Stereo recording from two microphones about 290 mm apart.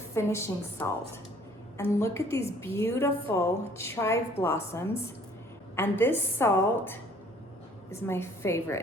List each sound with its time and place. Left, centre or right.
0.1 s a woman's voice: centre